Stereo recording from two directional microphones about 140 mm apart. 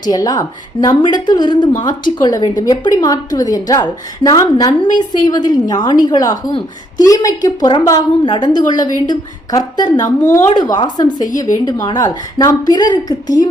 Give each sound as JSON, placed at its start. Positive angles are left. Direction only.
{"t": 0.0, "sound": "a woman's voice", "side_deg": 30}